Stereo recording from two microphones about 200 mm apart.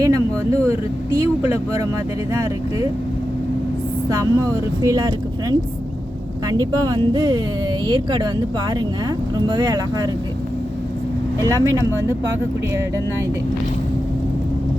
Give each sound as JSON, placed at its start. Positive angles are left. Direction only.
{"t": 0.0, "sound": "speech", "side_deg": -15}
{"t": 4.1, "sound": "speech", "side_deg": -20}
{"t": 11.4, "sound": "speech", "side_deg": -15}